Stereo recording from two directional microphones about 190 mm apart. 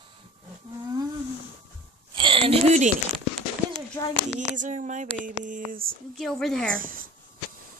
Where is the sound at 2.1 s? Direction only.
25° right (ahead or behind).